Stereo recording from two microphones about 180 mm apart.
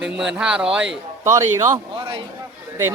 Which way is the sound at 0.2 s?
5° right (ahead or behind).